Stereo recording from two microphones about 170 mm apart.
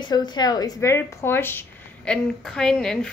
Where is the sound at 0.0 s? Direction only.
25° left (ahead or behind).